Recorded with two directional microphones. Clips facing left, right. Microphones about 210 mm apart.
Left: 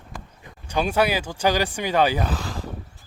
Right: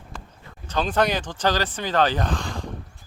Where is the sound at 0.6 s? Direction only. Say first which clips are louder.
Left 1 dB; 10° left (ahead or behind).